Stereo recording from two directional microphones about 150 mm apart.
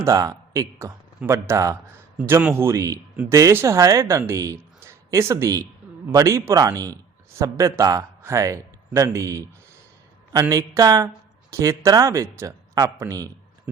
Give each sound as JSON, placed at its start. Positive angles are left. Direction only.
{"t": 0.0, "sound": "a man's voice", "side_deg": -25}
{"t": 10.5, "sound": "speech", "side_deg": -20}